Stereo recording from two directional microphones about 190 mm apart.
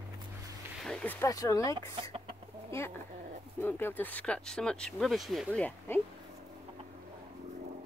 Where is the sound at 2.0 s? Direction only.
30° right (ahead or behind).